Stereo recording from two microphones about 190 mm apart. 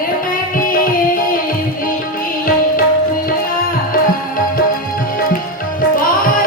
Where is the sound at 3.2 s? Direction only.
50° left (ahead or behind).